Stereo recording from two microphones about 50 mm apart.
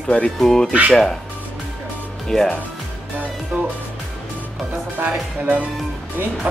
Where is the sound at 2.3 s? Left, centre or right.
Centre.